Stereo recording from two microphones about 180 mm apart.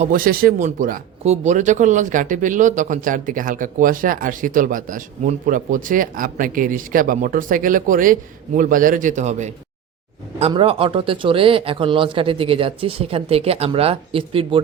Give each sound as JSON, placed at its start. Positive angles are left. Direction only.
{"t": 0.0, "sound": "speech", "side_deg": -50}